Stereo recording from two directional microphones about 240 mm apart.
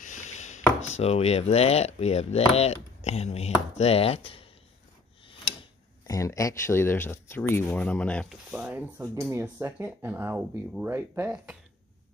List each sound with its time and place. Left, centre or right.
0.0 s a sound: left
0.9 s speech: left
6.0 s speech: centre